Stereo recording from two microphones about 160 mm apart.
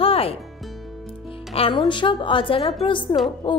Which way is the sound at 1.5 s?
35° left (ahead or behind).